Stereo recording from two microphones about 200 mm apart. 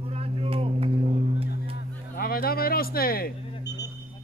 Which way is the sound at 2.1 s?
50° left (ahead or behind).